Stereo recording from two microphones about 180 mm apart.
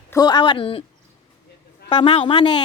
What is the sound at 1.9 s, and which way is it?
Speech, 30° left (ahead or behind).